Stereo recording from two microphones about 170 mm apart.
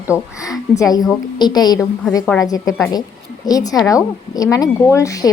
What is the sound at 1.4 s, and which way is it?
Speech, 25° left (ahead or behind).